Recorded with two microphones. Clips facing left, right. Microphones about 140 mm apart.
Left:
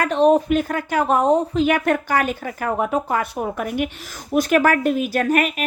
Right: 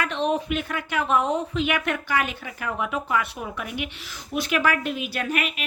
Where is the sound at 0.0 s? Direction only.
45° left (ahead or behind).